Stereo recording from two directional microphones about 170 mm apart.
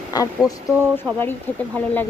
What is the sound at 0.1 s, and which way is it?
Speech, 20° left (ahead or behind).